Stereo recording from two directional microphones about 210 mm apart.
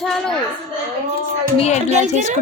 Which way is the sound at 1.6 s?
30° left (ahead or behind).